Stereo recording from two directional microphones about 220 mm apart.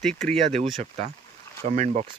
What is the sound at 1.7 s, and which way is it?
Speech, 30° right (ahead or behind).